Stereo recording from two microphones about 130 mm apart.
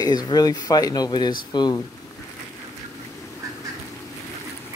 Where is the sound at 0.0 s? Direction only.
30° left (ahead or behind).